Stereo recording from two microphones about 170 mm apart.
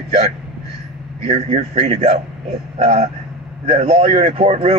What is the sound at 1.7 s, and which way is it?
A man's voice, 35° right (ahead or behind).